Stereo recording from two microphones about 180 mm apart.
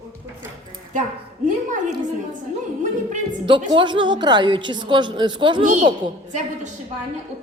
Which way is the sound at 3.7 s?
25° right (ahead or behind).